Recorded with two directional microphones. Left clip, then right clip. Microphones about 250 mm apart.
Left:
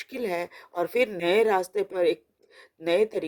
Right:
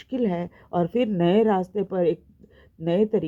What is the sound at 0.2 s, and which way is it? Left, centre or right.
Speech, left.